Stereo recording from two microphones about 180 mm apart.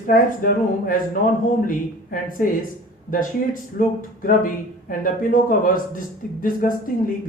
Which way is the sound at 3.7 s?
50° left (ahead or behind).